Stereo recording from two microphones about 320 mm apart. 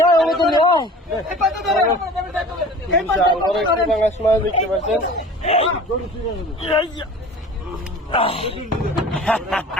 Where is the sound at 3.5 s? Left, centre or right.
Centre.